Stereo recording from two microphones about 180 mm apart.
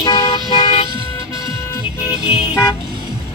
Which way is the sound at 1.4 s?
15° left (ahead or behind).